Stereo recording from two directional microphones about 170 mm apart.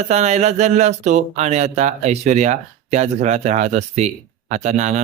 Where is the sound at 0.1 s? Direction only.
40° right (ahead or behind).